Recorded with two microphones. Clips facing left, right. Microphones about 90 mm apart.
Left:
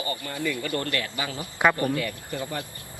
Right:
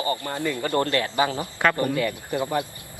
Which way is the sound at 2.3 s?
60° right (ahead or behind).